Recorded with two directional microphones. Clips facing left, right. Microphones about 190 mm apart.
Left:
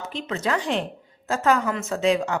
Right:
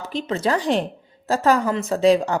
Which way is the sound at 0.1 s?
35° right (ahead or behind).